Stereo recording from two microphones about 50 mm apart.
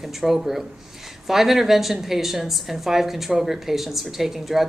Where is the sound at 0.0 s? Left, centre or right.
Centre.